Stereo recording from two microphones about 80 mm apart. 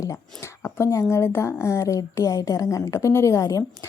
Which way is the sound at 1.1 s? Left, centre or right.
Left.